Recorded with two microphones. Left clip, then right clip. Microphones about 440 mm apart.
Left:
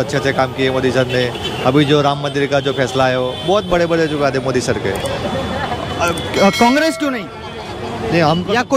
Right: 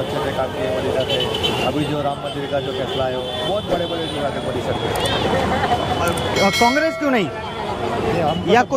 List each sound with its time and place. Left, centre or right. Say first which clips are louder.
2.0 s speech: left 7 dB; left
6.3 s speech: left 3 dB; centre